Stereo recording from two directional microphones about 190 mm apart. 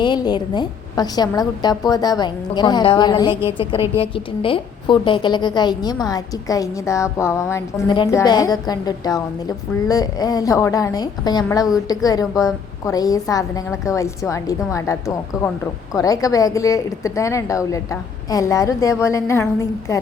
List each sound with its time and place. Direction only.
0.0 s a woman's voice: 25° left (ahead or behind)